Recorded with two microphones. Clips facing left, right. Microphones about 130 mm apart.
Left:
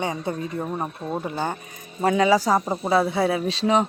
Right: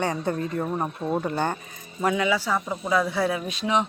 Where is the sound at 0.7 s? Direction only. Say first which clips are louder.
Right 2 dB; centre (ahead or behind).